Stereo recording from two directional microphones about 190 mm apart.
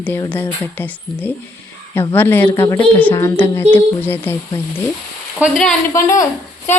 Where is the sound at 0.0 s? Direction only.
10° left (ahead or behind).